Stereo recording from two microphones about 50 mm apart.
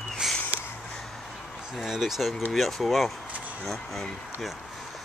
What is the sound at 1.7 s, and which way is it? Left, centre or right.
Speech, centre.